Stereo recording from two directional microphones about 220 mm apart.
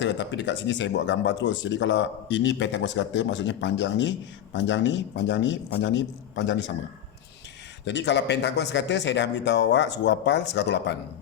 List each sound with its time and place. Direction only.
0.0 s speech: 55° left (ahead or behind)
7.9 s speech: 50° left (ahead or behind)